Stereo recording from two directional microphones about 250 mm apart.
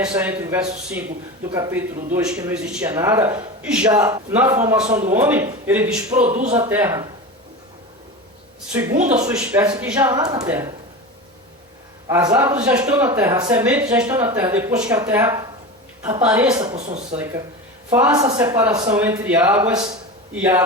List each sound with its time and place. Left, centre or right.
0.2 s a man's voice: centre
4.9 s speech: right
5.1 s a man's voice: centre
6.1 s speech: right
6.6 s a man's voice: centre
8.7 s a man's voice: centre
12.0 s a man's voice: centre
16.6 s speech: right
17.9 s a man's voice: centre